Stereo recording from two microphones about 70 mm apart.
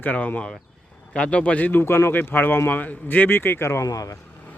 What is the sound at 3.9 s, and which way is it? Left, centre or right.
Speech, left.